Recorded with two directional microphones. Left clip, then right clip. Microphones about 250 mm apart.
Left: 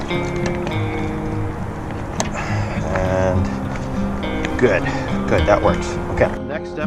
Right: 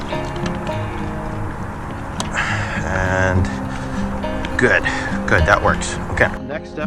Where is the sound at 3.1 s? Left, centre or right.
Right.